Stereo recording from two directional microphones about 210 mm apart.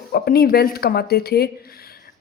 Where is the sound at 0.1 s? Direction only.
45° left (ahead or behind).